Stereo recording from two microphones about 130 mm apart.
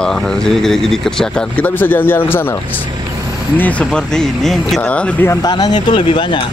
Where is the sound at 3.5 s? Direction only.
10° left (ahead or behind).